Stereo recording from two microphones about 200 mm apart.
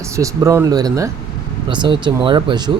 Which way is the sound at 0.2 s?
15° right (ahead or behind).